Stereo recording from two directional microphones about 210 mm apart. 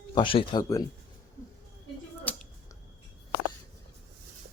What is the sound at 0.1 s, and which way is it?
Speech, 25° left (ahead or behind).